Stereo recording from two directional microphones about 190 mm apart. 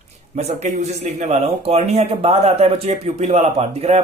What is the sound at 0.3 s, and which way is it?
Speech, 35° right (ahead or behind).